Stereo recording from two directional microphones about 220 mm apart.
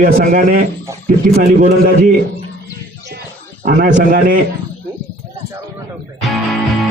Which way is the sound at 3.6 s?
40° right (ahead or behind).